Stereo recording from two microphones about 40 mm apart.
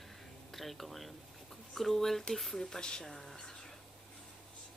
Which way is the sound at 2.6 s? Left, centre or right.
Centre.